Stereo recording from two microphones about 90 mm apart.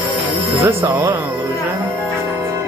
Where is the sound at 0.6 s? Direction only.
30° right (ahead or behind).